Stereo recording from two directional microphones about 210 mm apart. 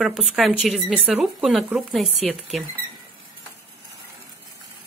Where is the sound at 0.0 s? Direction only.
Centre (ahead or behind).